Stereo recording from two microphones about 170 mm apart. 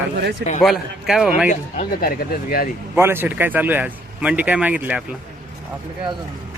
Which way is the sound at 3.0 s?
15° right (ahead or behind).